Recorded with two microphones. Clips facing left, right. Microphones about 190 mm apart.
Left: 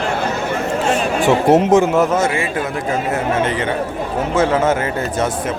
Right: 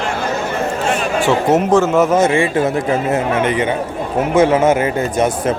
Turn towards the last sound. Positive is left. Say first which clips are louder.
# right 3 dB
turn(degrees=-15)  # may be behind; listen again after turning